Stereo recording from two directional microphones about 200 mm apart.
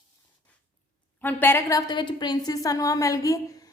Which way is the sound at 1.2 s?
10° left (ahead or behind).